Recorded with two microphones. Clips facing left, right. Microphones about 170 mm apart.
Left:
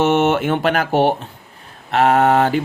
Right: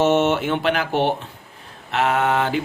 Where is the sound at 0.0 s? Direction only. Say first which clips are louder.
Left 2 dB; 60° left (ahead or behind).